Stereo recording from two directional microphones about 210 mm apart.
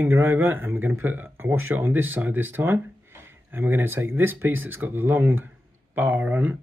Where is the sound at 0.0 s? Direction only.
10° right (ahead or behind).